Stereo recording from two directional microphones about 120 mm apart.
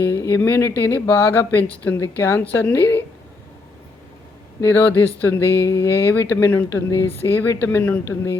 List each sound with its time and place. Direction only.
0.1 s a woman's voice: 20° left (ahead or behind)
4.6 s a woman's voice: 20° left (ahead or behind)